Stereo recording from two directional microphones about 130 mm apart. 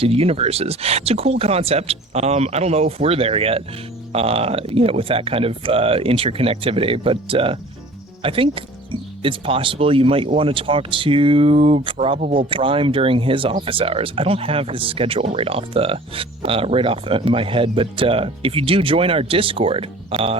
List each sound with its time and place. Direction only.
0.0 s speech: 50° right (ahead or behind)